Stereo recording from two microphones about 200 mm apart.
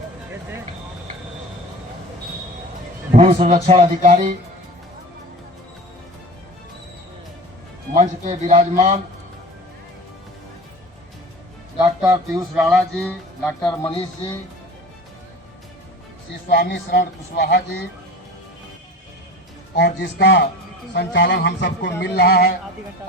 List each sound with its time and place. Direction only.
3.1 s a man's voice: 35° right (ahead or behind)
7.9 s speech: 40° right (ahead or behind)
11.8 s a man's voice: 15° right (ahead or behind)
12.5 s speech: 5° right (ahead or behind)
16.5 s speech: 50° left (ahead or behind)
19.7 s speech: 60° left (ahead or behind)